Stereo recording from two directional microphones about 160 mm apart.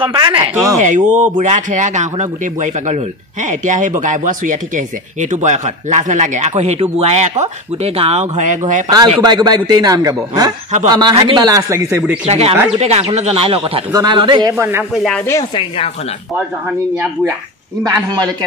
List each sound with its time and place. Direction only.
0.0 s speech: 30° right (ahead or behind)
0.7 s speech: 50° right (ahead or behind)
9.2 s a man's voice: 25° right (ahead or behind)
11.1 s speech: 35° right (ahead or behind)
11.4 s speech: 20° right (ahead or behind)
12.3 s a man's voice: 40° right (ahead or behind)
14.6 s speech: 15° right (ahead or behind)
15.0 s speech: 5° left (ahead or behind)
17.8 s a man's voice: 25° right (ahead or behind)